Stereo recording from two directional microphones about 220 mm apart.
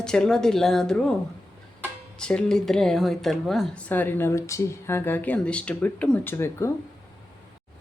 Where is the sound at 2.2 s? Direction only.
5° left (ahead or behind).